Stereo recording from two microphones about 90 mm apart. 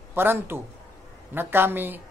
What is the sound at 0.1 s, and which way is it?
A man's voice, 25° right (ahead or behind).